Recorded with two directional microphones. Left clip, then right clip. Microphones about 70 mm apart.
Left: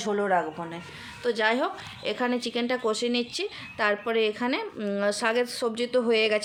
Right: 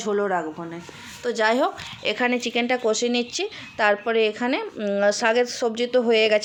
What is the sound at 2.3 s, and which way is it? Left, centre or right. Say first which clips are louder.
Speech: right 5 dB; centre.